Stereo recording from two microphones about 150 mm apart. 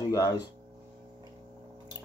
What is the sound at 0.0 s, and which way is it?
Music, 25° left (ahead or behind).